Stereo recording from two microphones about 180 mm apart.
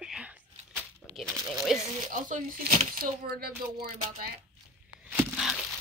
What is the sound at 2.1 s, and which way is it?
A woman's voice, 50° right (ahead or behind).